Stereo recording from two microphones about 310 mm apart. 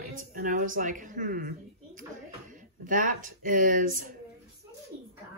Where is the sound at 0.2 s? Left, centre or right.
Right.